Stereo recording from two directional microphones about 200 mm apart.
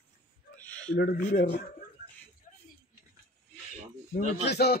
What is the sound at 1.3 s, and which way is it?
Speech, 40° left (ahead or behind).